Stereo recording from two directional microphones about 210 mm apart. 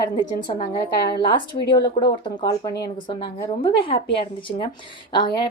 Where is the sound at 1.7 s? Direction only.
20° left (ahead or behind).